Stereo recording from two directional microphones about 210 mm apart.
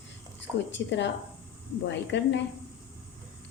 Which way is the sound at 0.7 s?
55° left (ahead or behind).